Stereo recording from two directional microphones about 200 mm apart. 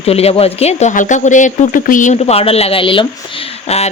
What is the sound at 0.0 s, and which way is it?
Speech, 30° left (ahead or behind).